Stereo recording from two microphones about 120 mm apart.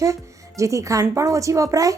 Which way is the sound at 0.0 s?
25° right (ahead or behind).